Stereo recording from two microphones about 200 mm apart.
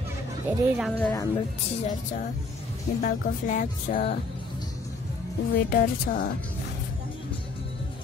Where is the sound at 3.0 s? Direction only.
40° left (ahead or behind).